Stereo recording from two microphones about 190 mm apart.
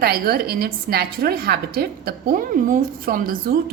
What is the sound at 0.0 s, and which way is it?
A woman's voice, 55° right (ahead or behind).